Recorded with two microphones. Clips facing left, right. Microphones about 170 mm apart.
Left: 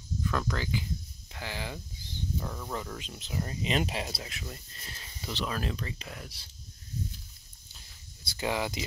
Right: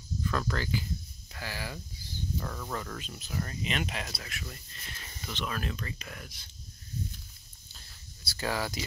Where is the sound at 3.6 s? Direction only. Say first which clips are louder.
Left 7 dB; 30° left (ahead or behind).